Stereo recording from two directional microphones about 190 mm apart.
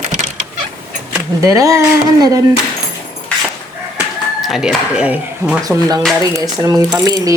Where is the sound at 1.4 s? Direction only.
15° right (ahead or behind).